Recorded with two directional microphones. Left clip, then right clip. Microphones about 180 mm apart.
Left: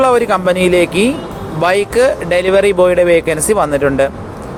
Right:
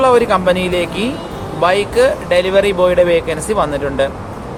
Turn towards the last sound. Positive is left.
turn(degrees=35)  # may be behind; listen again after turning